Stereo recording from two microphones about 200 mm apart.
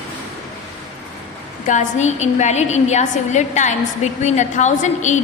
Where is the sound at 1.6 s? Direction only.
40° left (ahead or behind).